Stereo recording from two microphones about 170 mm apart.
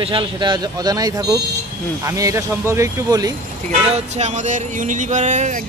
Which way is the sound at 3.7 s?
40° right (ahead or behind).